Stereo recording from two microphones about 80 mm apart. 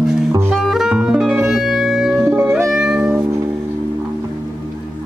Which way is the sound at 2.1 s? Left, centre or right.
Right.